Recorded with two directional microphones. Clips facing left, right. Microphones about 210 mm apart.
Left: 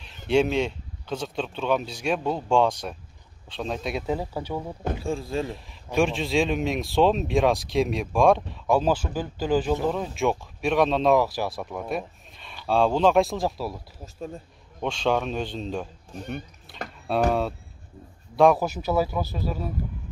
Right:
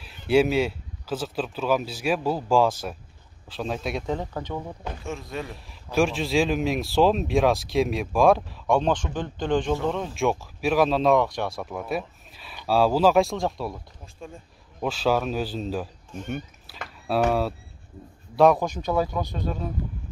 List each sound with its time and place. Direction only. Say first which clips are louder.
0.3 s a man's voice: right 2 dB; 5° right (ahead or behind)
5.0 s speech: left 4 dB; 30° left (ahead or behind)
5.7 s a man's voice: right 2 dB; centre (ahead or behind)
14.8 s a man's voice: right 1 dB; 5° right (ahead or behind)